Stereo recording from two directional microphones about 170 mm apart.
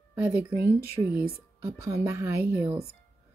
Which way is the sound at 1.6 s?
15° right (ahead or behind).